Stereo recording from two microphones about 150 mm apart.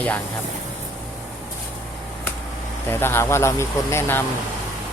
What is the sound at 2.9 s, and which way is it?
Speech, 15° left (ahead or behind).